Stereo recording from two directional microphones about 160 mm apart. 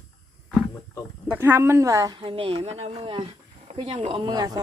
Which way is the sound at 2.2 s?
35° right (ahead or behind).